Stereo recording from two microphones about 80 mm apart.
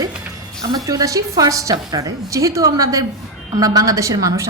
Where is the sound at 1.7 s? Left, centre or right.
Right.